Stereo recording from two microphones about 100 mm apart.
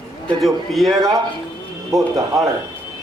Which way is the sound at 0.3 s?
Centre (ahead or behind).